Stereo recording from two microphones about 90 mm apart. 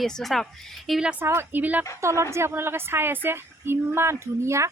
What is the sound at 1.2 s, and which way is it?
Speech, 25° right (ahead or behind).